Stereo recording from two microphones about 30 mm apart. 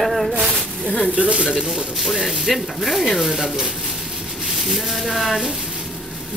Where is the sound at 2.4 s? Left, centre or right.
Centre.